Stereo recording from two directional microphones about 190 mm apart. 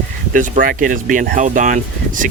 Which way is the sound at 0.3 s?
45° right (ahead or behind).